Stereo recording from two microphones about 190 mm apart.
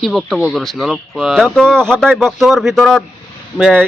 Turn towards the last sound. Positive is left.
turn(degrees=-5)  # may be behind; listen again after turning